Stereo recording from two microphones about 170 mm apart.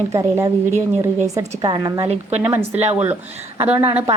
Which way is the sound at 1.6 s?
35° right (ahead or behind).